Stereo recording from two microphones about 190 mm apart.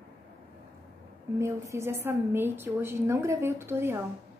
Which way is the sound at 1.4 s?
15° right (ahead or behind).